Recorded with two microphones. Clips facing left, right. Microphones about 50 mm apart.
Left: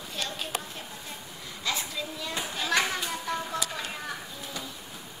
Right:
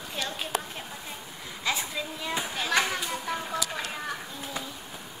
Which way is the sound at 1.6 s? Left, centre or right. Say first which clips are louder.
Right 2 dB; centre.